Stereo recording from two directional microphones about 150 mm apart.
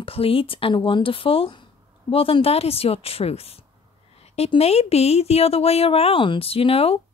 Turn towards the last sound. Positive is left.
turn(degrees=40)  # may be behind; listen again after turning